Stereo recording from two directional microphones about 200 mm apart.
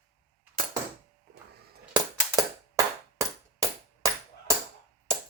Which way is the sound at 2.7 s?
15° right (ahead or behind).